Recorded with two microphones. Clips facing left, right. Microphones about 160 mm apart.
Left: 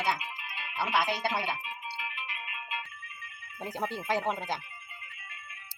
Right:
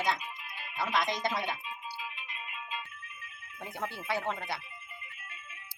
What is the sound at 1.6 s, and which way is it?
Music, 80° left.